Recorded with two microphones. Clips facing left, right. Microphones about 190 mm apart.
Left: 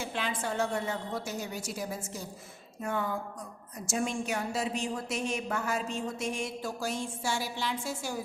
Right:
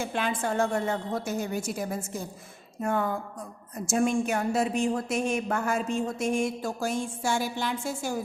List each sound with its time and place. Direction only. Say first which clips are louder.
0.0 s a woman's voice: right 5 dB; 50° right (ahead or behind)